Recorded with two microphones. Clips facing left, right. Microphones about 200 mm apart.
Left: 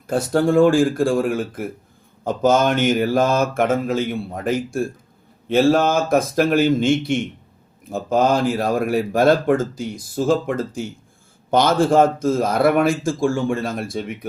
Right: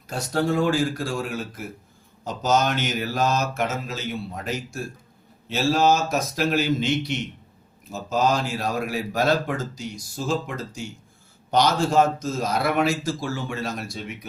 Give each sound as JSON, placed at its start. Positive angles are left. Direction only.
{"t": 0.1, "sound": "speech", "side_deg": 50}